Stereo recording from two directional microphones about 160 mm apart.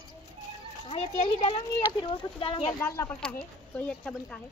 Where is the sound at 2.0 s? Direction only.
30° left (ahead or behind).